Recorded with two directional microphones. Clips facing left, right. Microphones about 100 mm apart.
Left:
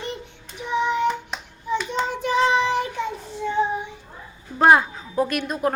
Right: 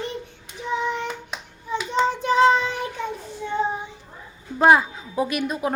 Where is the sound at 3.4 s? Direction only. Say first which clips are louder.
Left 1 dB; 60° left (ahead or behind).